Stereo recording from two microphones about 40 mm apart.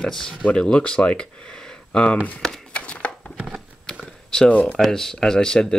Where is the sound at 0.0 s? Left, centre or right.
Centre.